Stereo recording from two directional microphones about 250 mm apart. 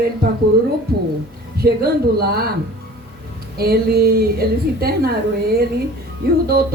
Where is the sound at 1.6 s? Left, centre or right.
Right.